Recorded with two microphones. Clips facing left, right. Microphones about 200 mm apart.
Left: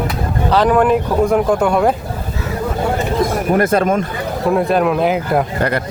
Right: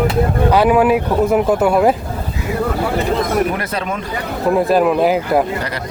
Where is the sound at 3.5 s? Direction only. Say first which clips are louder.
Left 8 dB; 45° left (ahead or behind).